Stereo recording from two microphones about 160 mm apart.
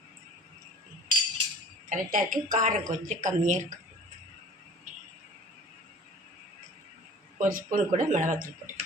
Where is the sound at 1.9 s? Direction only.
60° right (ahead or behind).